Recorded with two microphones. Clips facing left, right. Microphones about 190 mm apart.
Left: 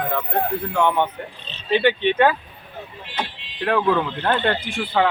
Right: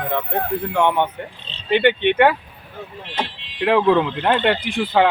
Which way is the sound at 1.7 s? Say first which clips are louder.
Right 2 dB; 60° right (ahead or behind).